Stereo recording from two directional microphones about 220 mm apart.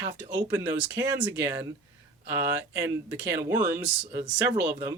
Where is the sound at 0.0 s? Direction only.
10° right (ahead or behind).